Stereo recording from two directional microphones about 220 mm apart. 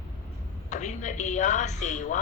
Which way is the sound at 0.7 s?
35° left (ahead or behind).